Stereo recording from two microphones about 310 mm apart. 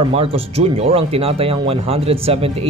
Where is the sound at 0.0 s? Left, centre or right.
Centre.